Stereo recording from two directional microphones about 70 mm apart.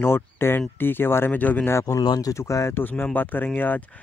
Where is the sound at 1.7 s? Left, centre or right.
Left.